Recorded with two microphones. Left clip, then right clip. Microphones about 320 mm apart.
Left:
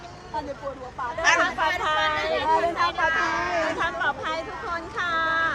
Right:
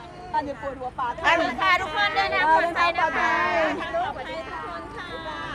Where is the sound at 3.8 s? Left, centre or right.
Left.